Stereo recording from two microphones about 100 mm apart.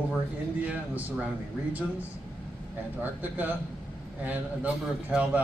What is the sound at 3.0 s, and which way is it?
Speech, 15° right (ahead or behind).